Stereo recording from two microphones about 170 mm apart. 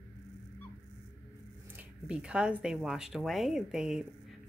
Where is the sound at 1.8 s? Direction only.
5° right (ahead or behind).